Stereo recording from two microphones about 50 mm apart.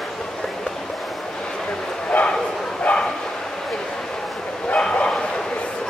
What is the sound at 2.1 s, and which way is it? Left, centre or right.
Bow-wow, left.